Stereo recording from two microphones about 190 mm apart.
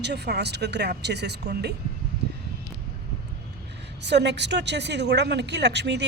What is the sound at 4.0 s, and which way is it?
Speech, 65° right (ahead or behind).